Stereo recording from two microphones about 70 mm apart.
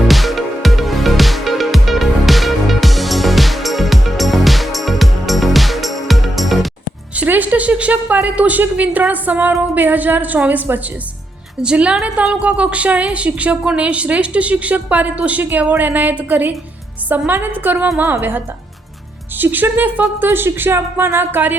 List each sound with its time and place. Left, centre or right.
0.1 s music: centre
7.2 s a woman's voice: right